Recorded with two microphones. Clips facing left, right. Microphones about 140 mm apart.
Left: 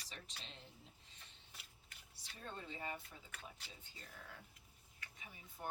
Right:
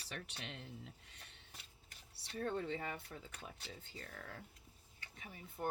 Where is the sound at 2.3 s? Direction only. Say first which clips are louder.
Right 11 dB; 65° right (ahead or behind).